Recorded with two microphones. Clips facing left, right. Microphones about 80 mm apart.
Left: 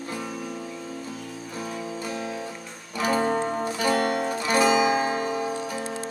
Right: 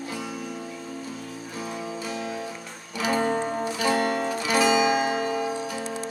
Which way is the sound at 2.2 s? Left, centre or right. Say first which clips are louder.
Even; centre.